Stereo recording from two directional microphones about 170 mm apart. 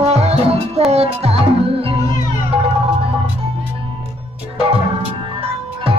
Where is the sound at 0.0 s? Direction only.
40° right (ahead or behind).